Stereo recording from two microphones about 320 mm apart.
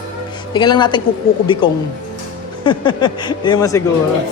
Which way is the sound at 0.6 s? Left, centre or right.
Centre.